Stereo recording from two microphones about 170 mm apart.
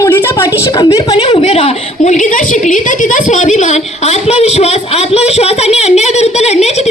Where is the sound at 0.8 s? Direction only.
30° left (ahead or behind).